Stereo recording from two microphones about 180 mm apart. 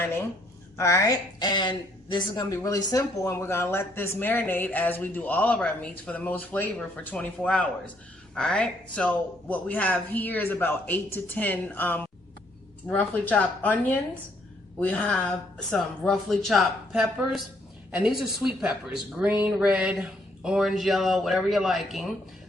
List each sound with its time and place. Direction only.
0.0 s a woman's voice: 15° left (ahead or behind)
14.8 s a woman's voice: 10° left (ahead or behind)